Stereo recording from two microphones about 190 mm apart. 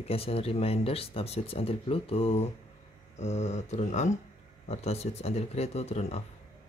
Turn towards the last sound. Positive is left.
turn(degrees=35)  # may be behind; listen again after turning